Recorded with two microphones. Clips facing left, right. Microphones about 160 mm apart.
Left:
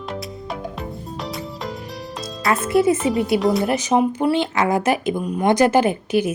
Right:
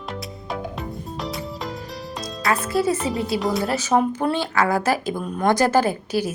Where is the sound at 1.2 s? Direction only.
Centre (ahead or behind).